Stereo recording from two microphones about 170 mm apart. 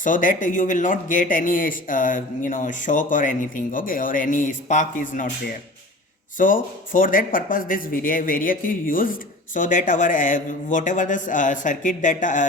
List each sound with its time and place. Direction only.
0.0 s a man's voice: 50° left (ahead or behind)
6.3 s a man's voice: 50° left (ahead or behind)